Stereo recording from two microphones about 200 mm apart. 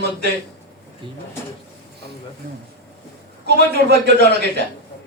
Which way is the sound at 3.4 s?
55° right (ahead or behind).